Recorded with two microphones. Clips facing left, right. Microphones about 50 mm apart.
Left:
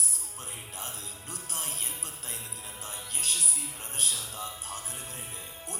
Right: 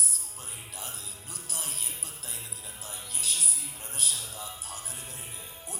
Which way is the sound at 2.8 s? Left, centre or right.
Left.